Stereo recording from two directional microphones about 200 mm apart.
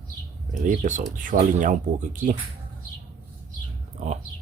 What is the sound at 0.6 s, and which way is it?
Speech, 40° right (ahead or behind).